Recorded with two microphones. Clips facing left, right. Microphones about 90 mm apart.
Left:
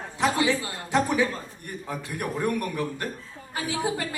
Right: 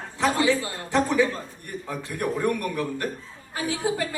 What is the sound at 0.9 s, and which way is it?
A woman's voice, 15° left (ahead or behind).